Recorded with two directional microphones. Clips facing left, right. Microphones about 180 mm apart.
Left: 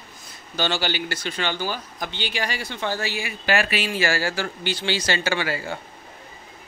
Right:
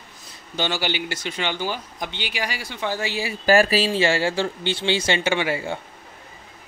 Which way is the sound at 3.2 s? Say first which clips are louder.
Right 8 dB; 35° right (ahead or behind).